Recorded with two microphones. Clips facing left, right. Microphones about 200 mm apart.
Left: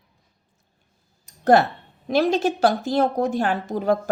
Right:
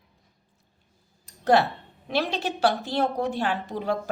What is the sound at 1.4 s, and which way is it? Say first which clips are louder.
A woman's voice: left 4 dB; 45° left (ahead or behind).